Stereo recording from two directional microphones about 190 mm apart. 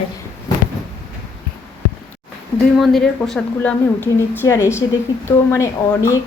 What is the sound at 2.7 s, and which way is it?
A woman's voice, centre (ahead or behind).